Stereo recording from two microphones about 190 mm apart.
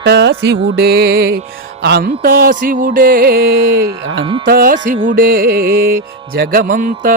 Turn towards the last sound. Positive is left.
turn(degrees=-45)  # may be behind; listen again after turning